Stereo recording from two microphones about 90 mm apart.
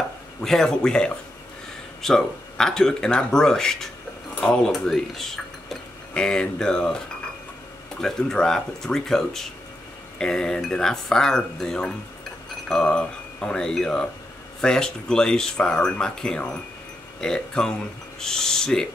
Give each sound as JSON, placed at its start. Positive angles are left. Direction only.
{"t": 0.4, "sound": "speech", "side_deg": 5}
{"t": 8.0, "sound": "speech", "side_deg": 5}
{"t": 12.6, "sound": "wind chime", "side_deg": 5}
{"t": 14.6, "sound": "speech", "side_deg": 10}